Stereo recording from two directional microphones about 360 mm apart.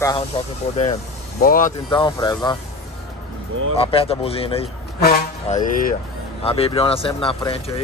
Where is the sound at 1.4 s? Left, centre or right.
Left.